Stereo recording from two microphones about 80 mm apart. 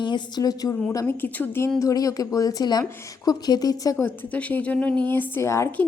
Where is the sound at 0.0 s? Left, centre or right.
Left.